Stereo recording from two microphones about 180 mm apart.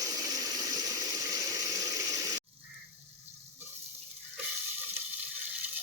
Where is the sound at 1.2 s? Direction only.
20° right (ahead or behind).